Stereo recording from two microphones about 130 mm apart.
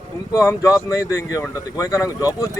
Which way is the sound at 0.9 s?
25° left (ahead or behind).